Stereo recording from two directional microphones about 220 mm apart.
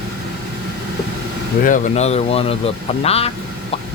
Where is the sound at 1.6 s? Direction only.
35° left (ahead or behind).